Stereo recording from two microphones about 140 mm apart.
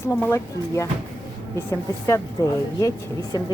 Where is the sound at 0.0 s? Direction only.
15° left (ahead or behind).